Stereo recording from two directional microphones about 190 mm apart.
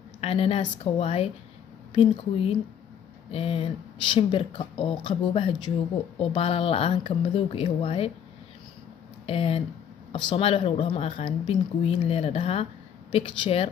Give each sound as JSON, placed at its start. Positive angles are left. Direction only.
{"t": 0.2, "sound": "speech", "side_deg": 30}
{"t": 9.2, "sound": "speech", "side_deg": 30}